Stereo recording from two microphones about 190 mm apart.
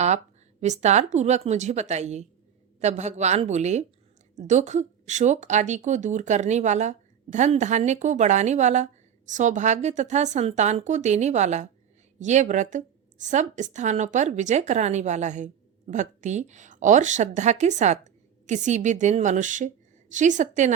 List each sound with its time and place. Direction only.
0.6 s speech: 35° right (ahead or behind)